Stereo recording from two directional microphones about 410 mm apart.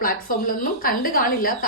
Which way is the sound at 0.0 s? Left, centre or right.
Left.